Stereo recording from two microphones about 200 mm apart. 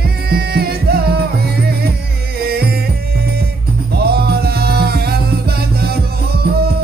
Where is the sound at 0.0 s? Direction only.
50° right (ahead or behind).